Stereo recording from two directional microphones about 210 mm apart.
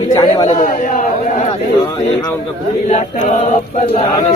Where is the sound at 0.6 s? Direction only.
45° left (ahead or behind).